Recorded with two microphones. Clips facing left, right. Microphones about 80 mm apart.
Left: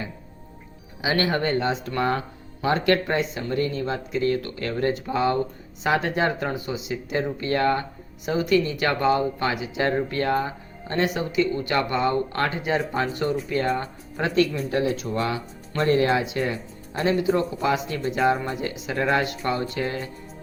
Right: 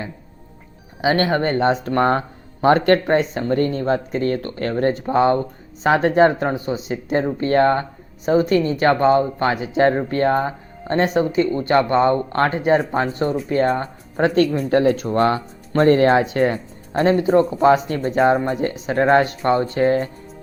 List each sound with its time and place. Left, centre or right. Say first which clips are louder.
1.0 s speech: right 5 dB; right